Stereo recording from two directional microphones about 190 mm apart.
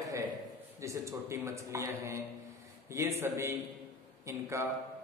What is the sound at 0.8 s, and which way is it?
A man's voice, 15° right (ahead or behind).